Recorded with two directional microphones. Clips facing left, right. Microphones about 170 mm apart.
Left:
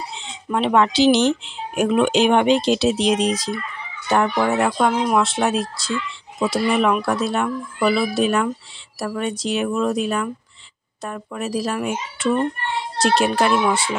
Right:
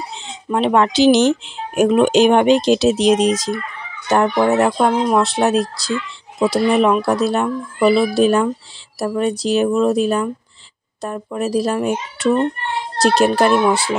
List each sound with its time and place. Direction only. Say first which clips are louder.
0.5 s speech: right 2 dB; 35° right (ahead or behind)